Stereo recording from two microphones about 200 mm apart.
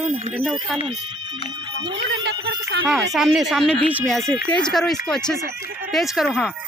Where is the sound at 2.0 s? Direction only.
55° right (ahead or behind).